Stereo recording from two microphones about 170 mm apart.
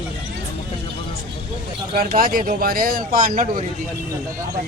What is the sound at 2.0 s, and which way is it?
Speech, 55° right (ahead or behind).